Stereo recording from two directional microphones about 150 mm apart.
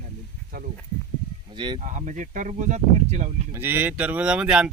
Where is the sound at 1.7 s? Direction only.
55° right (ahead or behind).